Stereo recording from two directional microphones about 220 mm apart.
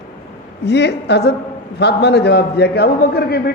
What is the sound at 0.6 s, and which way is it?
A woman's voice, 50° left (ahead or behind).